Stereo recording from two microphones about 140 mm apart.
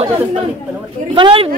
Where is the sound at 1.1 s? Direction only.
35° right (ahead or behind).